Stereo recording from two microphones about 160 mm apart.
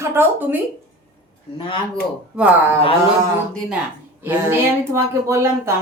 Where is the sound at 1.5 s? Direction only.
35° left (ahead or behind).